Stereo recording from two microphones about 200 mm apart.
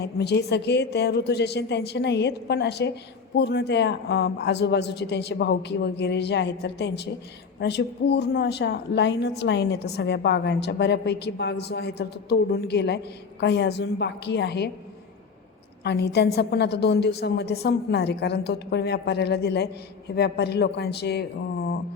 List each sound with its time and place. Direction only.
0.0 s a woman's voice: 55° left (ahead or behind)
15.8 s a woman's voice: 55° left (ahead or behind)